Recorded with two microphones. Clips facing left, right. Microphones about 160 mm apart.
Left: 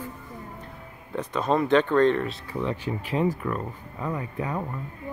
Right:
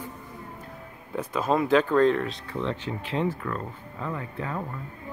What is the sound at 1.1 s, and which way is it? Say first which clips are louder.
A woman's voice: left 1 dB; 5° right (ahead or behind).